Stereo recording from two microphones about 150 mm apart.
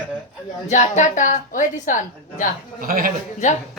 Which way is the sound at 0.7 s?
55° left (ahead or behind).